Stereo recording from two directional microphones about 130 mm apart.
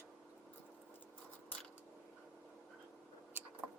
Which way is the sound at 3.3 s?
15° right (ahead or behind).